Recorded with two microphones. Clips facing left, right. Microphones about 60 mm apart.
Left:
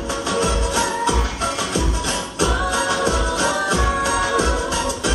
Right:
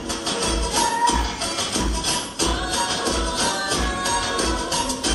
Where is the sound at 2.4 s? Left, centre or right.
Left.